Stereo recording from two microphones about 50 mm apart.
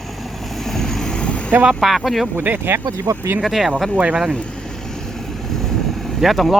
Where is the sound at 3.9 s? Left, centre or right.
Right.